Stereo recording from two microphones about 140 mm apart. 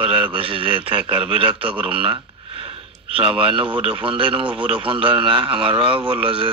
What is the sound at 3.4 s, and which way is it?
A man's voice, 40° right (ahead or behind).